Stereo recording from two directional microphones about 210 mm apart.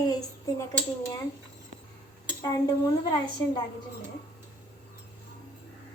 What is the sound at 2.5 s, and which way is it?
A woman's voice, 20° left (ahead or behind).